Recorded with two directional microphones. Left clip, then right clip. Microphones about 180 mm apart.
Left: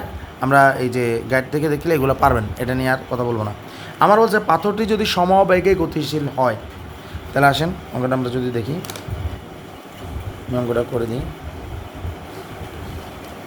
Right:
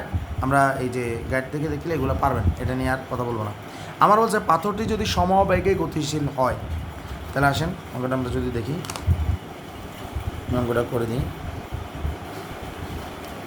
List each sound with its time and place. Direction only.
0.3 s a man's voice: 30° left (ahead or behind)
10.5 s speech: 10° left (ahead or behind)